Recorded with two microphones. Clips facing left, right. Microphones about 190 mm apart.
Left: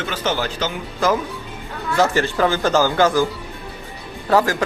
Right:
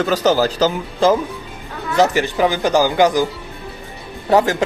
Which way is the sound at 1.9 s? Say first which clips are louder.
Right 2 dB; 15° right (ahead or behind).